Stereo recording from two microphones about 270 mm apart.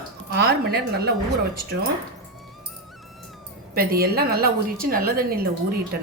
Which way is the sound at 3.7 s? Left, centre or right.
Right.